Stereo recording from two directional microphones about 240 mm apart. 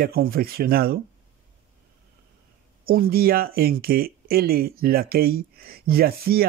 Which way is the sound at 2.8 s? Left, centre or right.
Right.